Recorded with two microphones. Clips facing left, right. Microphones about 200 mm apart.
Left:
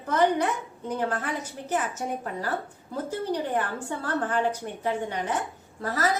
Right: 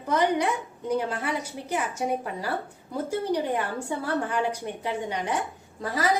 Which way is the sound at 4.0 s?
10° right (ahead or behind).